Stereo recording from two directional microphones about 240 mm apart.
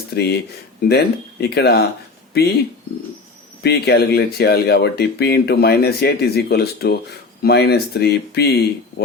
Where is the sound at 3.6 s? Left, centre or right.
Left.